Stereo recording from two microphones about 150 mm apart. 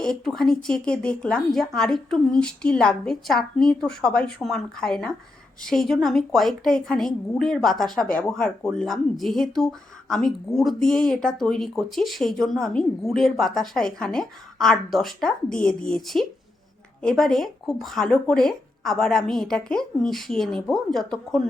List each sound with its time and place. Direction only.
0.0 s speech: 5° left (ahead or behind)